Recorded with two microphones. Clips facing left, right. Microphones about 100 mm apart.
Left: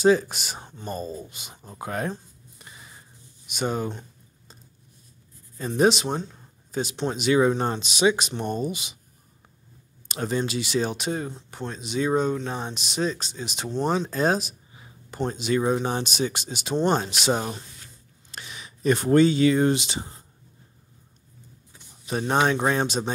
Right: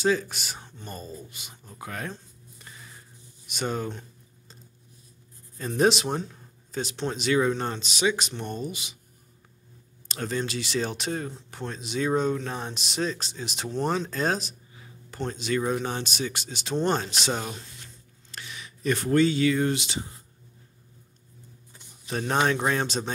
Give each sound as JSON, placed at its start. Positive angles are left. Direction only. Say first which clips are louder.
{"t": 0.0, "sound": "speech", "louder": "left 5 dB", "side_deg": 20}
{"t": 2.6, "sound": "a sound", "louder": "left 1 dB", "side_deg": 15}
{"t": 3.4, "sound": "speech", "louder": "left 3 dB", "side_deg": 5}
{"t": 5.6, "sound": "speech", "louder": "left 2 dB", "side_deg": 5}
{"t": 10.0, "sound": "speech", "louder": "left 3 dB", "side_deg": 15}
{"t": 16.7, "sound": "speech", "louder": "left 3 dB", "side_deg": 5}
{"t": 17.3, "sound": "speech", "louder": "left 7 dB", "side_deg": 20}
{"t": 21.7, "sound": "speech", "louder": "left 3 dB", "side_deg": 10}